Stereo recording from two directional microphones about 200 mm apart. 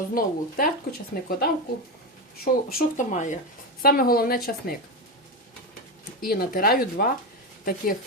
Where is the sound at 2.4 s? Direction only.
45° left (ahead or behind).